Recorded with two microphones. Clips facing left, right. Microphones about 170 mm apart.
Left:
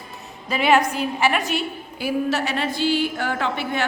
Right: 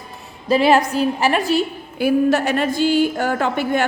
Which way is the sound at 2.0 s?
50° right (ahead or behind).